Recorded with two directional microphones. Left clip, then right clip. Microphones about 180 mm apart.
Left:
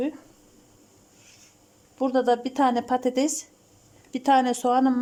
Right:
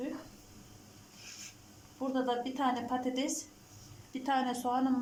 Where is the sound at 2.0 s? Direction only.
65° left (ahead or behind).